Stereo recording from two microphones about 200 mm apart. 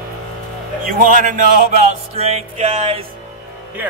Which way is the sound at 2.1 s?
30° right (ahead or behind).